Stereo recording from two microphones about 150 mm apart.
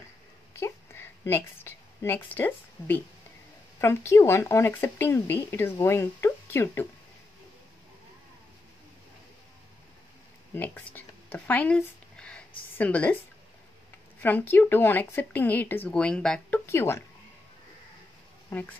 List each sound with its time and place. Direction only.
0.5 s a sound: 15° left (ahead or behind)
3.8 s speech: 15° left (ahead or behind)
10.5 s a sound: 15° left (ahead or behind)
12.7 s speech: 10° left (ahead or behind)
14.2 s speech: 10° left (ahead or behind)
18.5 s speech: 10° left (ahead or behind)